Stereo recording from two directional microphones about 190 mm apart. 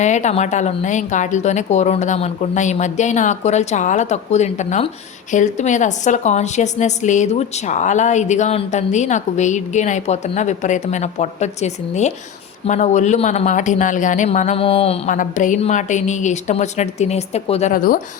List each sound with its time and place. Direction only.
0.0 s a woman's voice: 40° left (ahead or behind)